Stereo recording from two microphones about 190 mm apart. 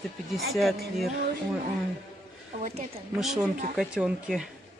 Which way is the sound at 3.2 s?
Centre (ahead or behind).